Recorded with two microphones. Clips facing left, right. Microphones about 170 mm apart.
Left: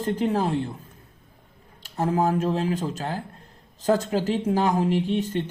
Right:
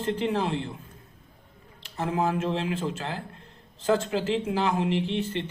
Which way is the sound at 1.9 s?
40° left (ahead or behind).